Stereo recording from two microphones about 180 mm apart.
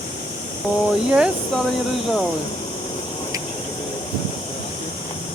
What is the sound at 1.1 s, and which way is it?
Speech, 5° right (ahead or behind).